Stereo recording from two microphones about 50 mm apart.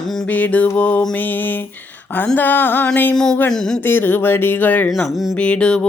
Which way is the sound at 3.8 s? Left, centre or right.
Left.